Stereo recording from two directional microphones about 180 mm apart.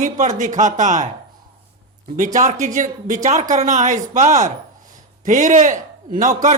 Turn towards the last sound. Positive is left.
turn(degrees=-45)  # may be behind; listen again after turning